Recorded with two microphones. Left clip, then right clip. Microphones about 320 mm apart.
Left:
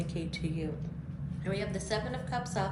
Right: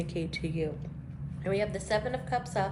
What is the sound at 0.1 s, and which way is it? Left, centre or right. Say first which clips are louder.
A woman's voice: right 3 dB; right.